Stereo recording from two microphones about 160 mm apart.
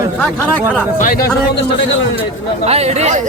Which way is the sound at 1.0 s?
65° left (ahead or behind).